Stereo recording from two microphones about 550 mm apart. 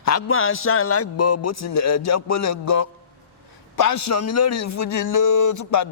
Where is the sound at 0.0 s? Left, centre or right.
Left.